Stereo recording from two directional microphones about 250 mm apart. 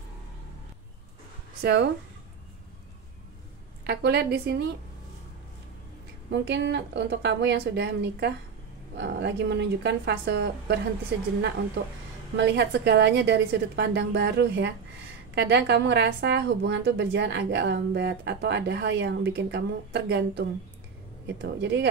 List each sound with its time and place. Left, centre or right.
1.6 s a woman's voice: right
3.8 s a woman's voice: right
6.3 s a woman's voice: right
12.4 s a woman's voice: right